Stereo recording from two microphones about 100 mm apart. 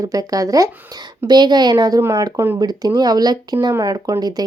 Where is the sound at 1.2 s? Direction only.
45° right (ahead or behind).